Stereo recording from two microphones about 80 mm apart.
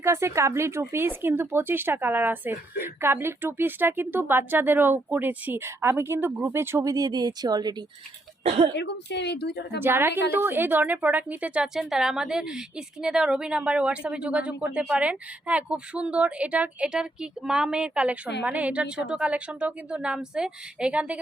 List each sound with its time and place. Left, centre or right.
0.0 s speech: right
6.8 s speech: right
9.8 s speech: right
11.6 s a woman's voice: centre